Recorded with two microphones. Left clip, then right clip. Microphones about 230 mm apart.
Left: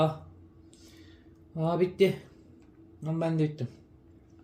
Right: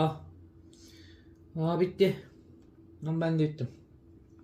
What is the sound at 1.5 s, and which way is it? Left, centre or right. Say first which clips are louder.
Speech: left 1 dB; centre.